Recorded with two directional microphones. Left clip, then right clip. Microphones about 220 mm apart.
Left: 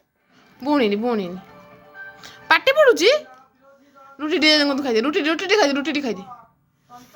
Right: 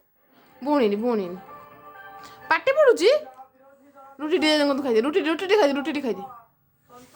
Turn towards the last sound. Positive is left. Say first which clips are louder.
# left 3 dB
turn(degrees=-15)  # may be behind; listen again after turning